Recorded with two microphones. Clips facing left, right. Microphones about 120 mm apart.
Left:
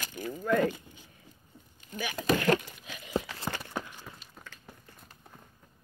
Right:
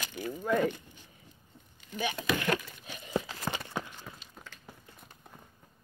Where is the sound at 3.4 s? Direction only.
15° right (ahead or behind).